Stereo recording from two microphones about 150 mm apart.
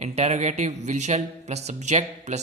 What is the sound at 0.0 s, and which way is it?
Speech, 45° right (ahead or behind).